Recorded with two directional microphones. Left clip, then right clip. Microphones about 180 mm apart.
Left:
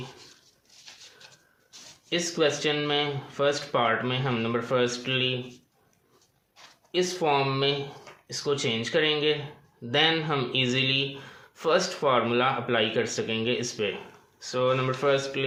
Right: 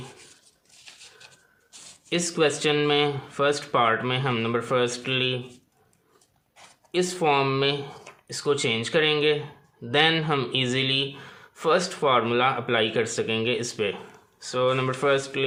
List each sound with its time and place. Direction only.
2.0 s speech: 30° right (ahead or behind)
6.9 s speech: 30° right (ahead or behind)